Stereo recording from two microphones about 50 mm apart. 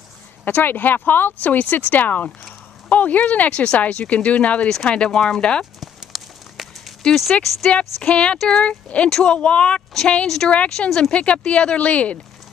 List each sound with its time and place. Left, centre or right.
0.5 s speech: left; by 5.6 s centre
5.8 s a sound: centre
7.4 s speech: centre
7.7 s speech: left
10.2 s speech: centre
10.5 s speech: left